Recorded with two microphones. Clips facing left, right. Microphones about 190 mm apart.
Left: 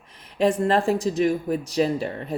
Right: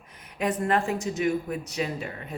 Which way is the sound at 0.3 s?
30° left (ahead or behind).